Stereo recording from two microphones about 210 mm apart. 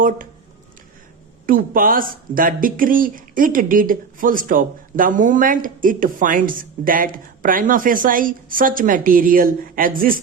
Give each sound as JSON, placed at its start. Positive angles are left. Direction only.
{"t": 1.5, "sound": "speech", "side_deg": -40}